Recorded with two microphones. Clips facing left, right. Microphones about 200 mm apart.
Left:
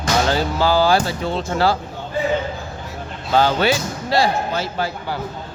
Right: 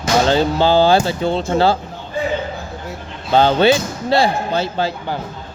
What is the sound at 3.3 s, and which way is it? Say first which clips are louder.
Speech: right 4 dB; 25° right (ahead or behind).